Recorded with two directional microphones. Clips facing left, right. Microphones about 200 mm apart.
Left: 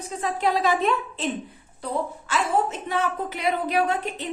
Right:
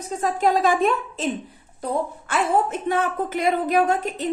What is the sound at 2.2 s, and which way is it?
A woman's voice, 55° right (ahead or behind).